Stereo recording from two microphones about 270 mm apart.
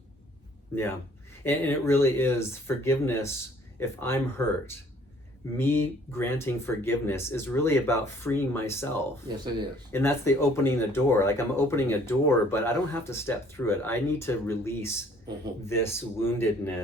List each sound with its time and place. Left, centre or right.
1.5 s speech: centre
5.5 s speech: centre
9.3 s speech: centre
9.9 s speech: centre